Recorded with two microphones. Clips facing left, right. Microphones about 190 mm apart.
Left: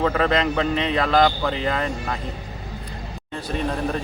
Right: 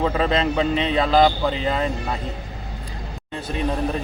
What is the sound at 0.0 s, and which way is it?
Speech, 15° right (ahead or behind).